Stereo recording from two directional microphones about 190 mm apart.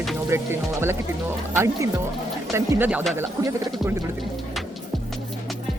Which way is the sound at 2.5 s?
15° right (ahead or behind).